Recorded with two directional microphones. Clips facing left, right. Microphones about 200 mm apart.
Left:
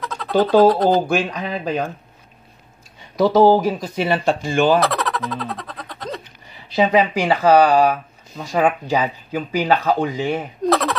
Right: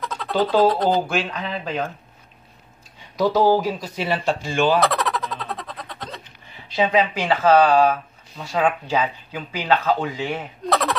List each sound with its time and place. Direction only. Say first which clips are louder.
0.0 s speech: left 4 dB; centre (ahead or behind)
1.0 s speech: left 4 dB; 40° left (ahead or behind)
3.2 s speech: left 4 dB; 50° left (ahead or behind)
4.7 s a sound: left 1 dB; centre (ahead or behind)
6.7 s speech: left 3 dB; 35° left (ahead or behind)
10.7 s a sound: left 3 dB; centre (ahead or behind)